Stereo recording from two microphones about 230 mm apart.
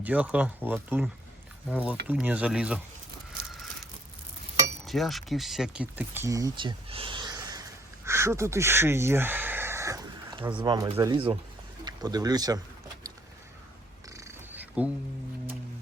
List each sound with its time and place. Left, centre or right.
0.0 s speech: centre
4.9 s speech: centre
14.1 s wild animals: centre